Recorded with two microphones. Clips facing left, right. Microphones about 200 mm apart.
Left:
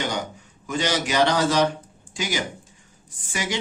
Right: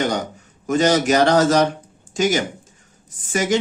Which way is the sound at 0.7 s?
45° right (ahead or behind).